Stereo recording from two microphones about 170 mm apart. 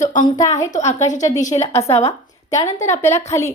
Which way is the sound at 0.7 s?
40° left (ahead or behind).